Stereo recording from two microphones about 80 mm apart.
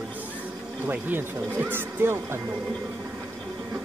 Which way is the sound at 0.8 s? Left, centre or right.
Right.